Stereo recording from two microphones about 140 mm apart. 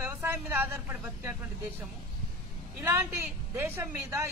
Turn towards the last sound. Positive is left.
turn(degrees=-20)  # may be behind; listen again after turning